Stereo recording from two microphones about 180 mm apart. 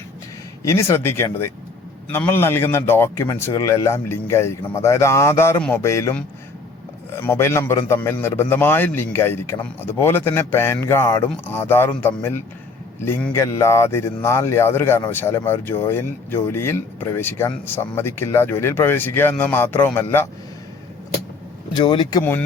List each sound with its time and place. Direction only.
0.6 s speech: 15° left (ahead or behind)
21.7 s speech: 25° left (ahead or behind)
22.2 s speech: 10° left (ahead or behind)